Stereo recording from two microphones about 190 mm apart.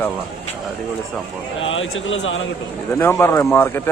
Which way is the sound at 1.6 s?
90° left.